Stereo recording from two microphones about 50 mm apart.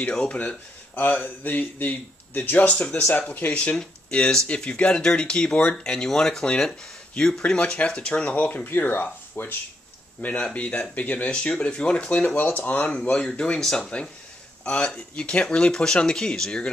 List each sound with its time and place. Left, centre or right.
0.1 s speech: centre
0.4 s speech: left
4.1 s speech: left
8.6 s speech: left
10.3 s speech: left
12.4 s speech: left
13.4 s speech: centre